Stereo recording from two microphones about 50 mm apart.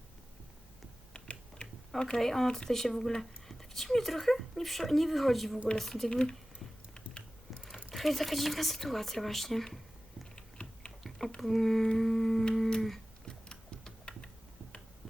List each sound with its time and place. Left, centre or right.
1.1 s typing: centre
2.0 s speech: centre
7.9 s speech: centre
10.3 s typing: centre
11.3 s speech: centre
13.2 s typing: centre